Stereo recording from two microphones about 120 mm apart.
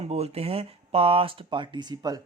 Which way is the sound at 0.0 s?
60° right (ahead or behind).